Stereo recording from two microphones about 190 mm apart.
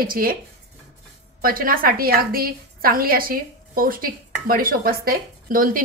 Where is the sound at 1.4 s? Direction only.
50° right (ahead or behind).